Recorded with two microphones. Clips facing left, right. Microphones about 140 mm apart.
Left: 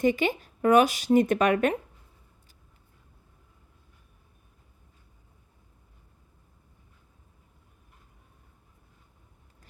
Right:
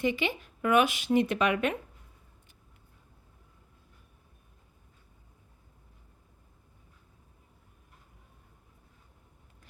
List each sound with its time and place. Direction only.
0.0 s speech: 45° left (ahead or behind)